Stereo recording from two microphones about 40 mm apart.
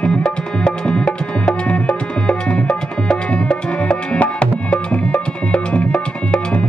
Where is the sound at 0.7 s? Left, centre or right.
Left.